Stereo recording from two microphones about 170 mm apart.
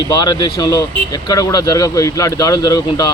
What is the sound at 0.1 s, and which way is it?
Speech, 25° left (ahead or behind).